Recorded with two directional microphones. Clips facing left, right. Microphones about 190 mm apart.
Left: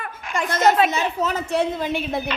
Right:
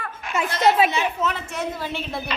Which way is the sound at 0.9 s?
40° left (ahead or behind).